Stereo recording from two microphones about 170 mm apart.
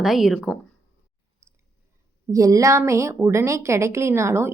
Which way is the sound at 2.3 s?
20° right (ahead or behind).